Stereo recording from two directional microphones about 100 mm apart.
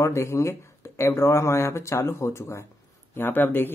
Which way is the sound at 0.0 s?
30° left (ahead or behind).